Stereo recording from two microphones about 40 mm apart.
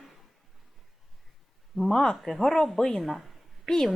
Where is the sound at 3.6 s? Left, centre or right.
Centre.